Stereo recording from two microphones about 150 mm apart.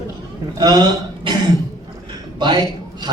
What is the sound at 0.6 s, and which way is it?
Speech, 30° right (ahead or behind).